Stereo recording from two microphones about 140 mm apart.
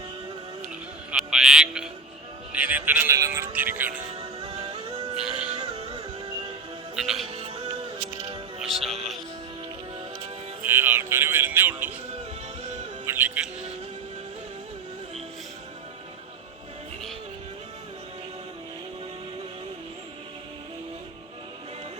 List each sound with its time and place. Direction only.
1.1 s a sound: 5° right (ahead or behind)
2.5 s a man's voice: 10° right (ahead or behind)
3.2 s music: 20° right (ahead or behind)
3.5 s a man's voice: 10° right (ahead or behind)
4.6 s music: 30° right (ahead or behind)
5.2 s music: 5° right (ahead or behind)
5.5 s music: 30° right (ahead or behind)
6.9 s music: centre (ahead or behind)
8.5 s music: 45° right (ahead or behind)
10.6 s a man's voice: 15° right (ahead or behind)
13.1 s speech: 10° right (ahead or behind)